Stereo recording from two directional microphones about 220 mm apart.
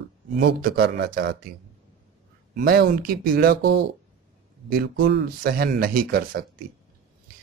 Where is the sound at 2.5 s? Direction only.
45° right (ahead or behind).